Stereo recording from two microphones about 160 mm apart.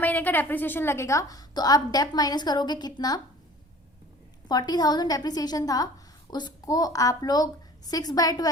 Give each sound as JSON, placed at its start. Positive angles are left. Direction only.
{"t": 0.0, "sound": "a woman's voice", "side_deg": 10}
{"t": 4.4, "sound": "a woman's voice", "side_deg": 25}